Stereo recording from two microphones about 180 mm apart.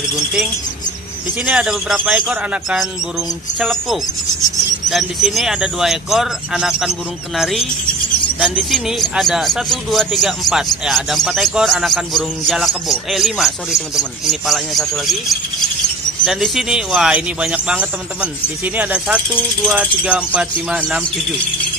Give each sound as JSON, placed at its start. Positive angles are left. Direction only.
{"t": 1.4, "sound": "speech", "side_deg": -5}